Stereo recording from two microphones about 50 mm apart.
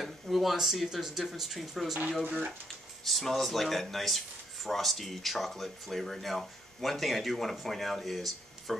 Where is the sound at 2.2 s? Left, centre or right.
Right.